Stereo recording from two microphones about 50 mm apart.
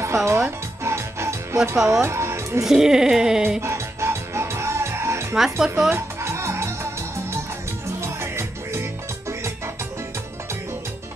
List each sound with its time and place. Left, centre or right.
0.0 s music: right
2.6 s speech: centre
3.6 s music: right
5.3 s speech: centre
5.9 s music: right
8.0 s music: right